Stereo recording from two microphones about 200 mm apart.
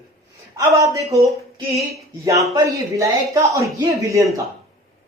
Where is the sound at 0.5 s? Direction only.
15° right (ahead or behind).